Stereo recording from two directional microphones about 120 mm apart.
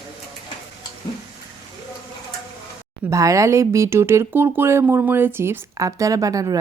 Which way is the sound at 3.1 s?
25° right (ahead or behind).